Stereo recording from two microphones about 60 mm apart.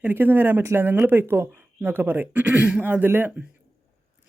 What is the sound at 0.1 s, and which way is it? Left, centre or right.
Speech, right.